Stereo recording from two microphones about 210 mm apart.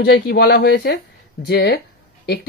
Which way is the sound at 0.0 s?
50° left (ahead or behind).